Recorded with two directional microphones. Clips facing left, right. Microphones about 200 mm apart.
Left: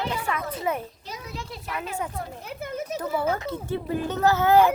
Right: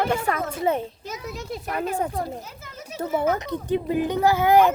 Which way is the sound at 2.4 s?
55° left (ahead or behind).